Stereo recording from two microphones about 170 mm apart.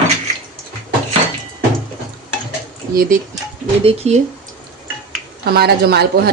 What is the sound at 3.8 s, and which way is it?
Speech, 35° right (ahead or behind).